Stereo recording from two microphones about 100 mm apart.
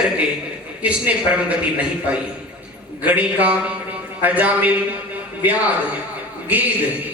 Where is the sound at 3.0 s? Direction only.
15° right (ahead or behind).